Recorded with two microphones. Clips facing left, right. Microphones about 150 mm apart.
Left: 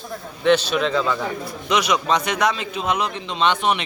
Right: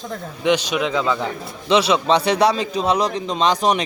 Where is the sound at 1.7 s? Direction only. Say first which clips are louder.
Right 4 dB; 30° right (ahead or behind).